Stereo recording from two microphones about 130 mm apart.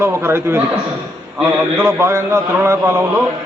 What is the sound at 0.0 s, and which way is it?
Speech, 20° right (ahead or behind).